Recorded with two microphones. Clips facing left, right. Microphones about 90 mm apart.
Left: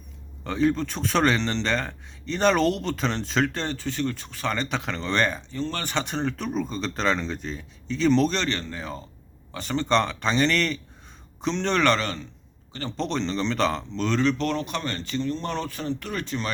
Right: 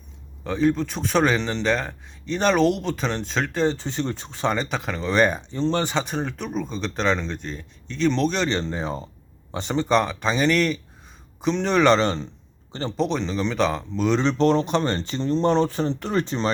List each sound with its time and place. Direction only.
0.4 s a man's voice: centre (ahead or behind)
3.6 s speech: 20° right (ahead or behind)
4.6 s speech: 5° right (ahead or behind)
6.1 s a man's voice: 5° right (ahead or behind)
8.4 s speech: 25° right (ahead or behind)
9.7 s a man's voice: 5° right (ahead or behind)
11.9 s speech: 25° right (ahead or behind)
13.0 s a man's voice: 5° right (ahead or behind)
14.1 s speech: 25° right (ahead or behind)